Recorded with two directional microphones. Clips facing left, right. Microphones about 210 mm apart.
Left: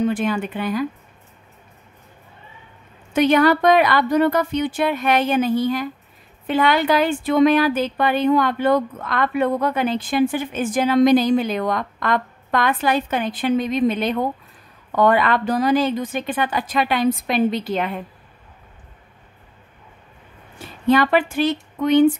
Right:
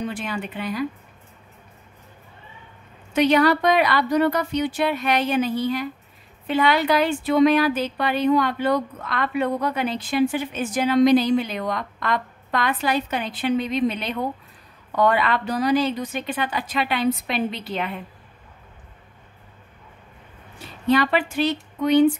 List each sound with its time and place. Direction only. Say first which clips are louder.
0.0 s speech: left 8 dB; 50° left (ahead or behind)
3.1 s speech: left 2 dB; 50° left (ahead or behind)
21.0 s speech: left 3 dB; 50° left (ahead or behind)